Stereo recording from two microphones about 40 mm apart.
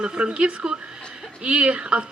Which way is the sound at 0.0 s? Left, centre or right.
Right.